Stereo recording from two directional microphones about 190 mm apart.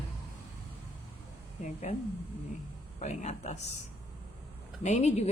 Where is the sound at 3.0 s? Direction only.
35° left (ahead or behind).